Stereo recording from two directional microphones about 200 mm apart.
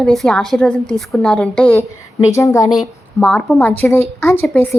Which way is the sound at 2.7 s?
Centre (ahead or behind).